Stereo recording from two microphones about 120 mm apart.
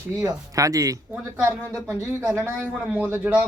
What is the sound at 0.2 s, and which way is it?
A man's voice, 30° right (ahead or behind).